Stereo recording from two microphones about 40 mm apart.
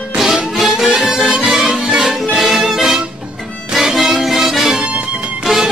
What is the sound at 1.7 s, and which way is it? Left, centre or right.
Music, right.